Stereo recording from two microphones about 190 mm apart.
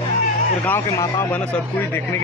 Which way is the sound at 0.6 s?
15° left (ahead or behind).